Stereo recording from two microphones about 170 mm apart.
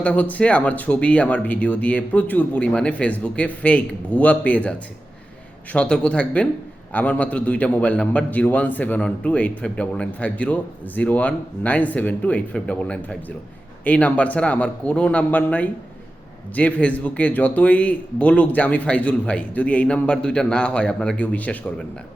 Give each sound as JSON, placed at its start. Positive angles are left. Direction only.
{"t": 0.0, "sound": "a man's voice", "side_deg": 10}
{"t": 5.7, "sound": "a man's voice", "side_deg": 5}